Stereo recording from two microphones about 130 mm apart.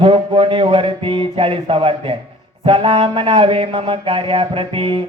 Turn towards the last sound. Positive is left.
turn(degrees=-45)  # may be behind; listen again after turning